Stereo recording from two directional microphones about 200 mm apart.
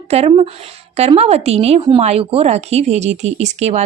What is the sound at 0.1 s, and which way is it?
Speech, 30° right (ahead or behind).